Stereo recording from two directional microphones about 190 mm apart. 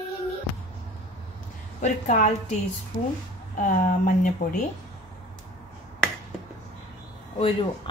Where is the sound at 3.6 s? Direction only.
45° left (ahead or behind).